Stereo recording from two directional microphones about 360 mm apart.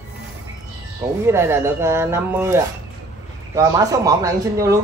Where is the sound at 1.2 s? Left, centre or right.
Centre.